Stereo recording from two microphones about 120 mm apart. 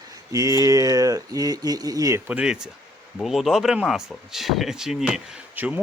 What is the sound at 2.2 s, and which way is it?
Speech, 10° right (ahead or behind).